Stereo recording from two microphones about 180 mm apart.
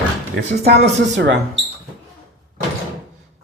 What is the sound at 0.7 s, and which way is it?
Speech, 70° right (ahead or behind).